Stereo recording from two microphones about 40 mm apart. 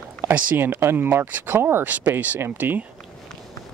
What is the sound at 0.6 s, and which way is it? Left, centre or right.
Speech, right.